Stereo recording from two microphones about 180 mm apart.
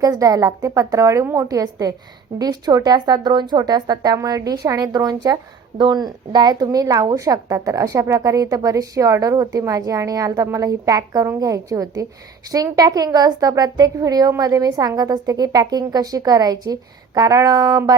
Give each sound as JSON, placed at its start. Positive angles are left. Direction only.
{"t": 0.0, "sound": "a woman's voice", "side_deg": -20}